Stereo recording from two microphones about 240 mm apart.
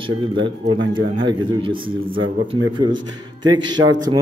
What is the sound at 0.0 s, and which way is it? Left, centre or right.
A man's voice, right.